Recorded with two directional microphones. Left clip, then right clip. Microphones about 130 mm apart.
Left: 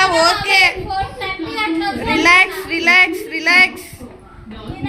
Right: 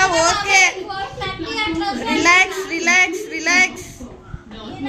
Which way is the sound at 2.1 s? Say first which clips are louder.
Left 3 dB; centre (ahead or behind).